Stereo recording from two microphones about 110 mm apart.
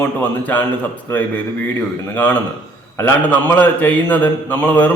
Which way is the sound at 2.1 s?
15° left (ahead or behind).